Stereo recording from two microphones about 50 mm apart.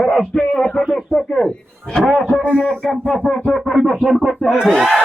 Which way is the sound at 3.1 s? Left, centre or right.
Centre.